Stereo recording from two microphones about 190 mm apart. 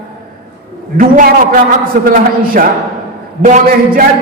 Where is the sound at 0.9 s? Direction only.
45° right (ahead or behind).